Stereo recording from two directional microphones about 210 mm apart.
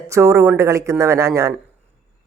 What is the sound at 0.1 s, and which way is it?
Speech, 15° right (ahead or behind).